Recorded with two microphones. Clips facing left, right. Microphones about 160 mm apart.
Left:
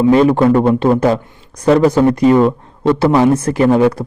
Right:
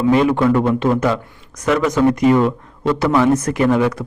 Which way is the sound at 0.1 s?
35° left (ahead or behind).